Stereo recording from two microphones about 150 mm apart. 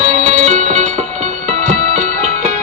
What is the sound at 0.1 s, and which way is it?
Music, 50° right (ahead or behind).